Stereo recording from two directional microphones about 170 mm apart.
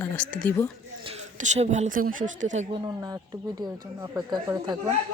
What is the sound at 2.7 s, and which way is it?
Speech, 25° right (ahead or behind).